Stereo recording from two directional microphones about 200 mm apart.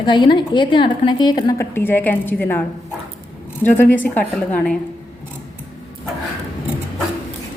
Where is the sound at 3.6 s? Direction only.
10° left (ahead or behind).